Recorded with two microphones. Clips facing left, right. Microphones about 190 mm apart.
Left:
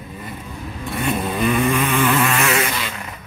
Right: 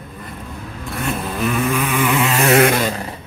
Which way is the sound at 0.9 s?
Centre (ahead or behind).